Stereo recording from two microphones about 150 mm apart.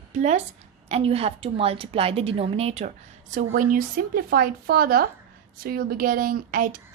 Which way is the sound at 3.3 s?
60° right (ahead or behind).